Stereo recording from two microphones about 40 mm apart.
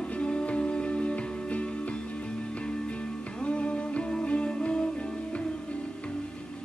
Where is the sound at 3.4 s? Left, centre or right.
Left.